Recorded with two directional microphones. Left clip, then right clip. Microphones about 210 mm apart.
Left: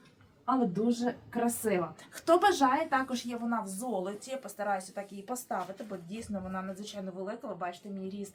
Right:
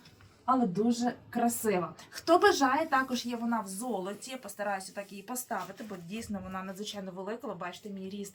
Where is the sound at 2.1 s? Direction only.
20° left (ahead or behind).